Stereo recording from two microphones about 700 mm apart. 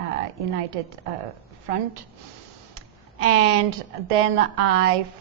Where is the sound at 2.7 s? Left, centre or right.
Right.